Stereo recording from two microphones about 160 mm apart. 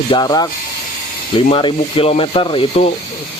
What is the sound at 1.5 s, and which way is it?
Speech, 35° left (ahead or behind).